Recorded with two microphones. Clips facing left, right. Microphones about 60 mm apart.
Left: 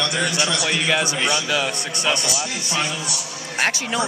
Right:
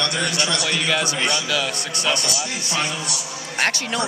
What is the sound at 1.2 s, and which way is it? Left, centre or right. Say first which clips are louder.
Speech: left 1 dB; centre.